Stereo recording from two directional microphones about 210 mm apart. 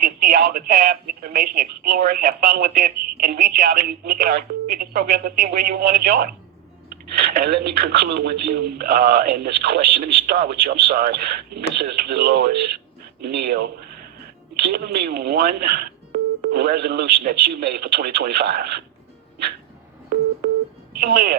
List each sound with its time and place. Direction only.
0.0 s a woman's voice: 40° right (ahead or behind)
21.0 s speech: 45° right (ahead or behind)